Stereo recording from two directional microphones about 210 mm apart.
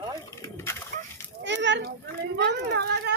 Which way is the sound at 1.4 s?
60° right (ahead or behind).